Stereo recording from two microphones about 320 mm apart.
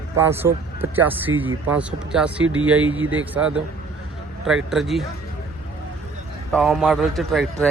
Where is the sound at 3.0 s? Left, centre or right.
Right.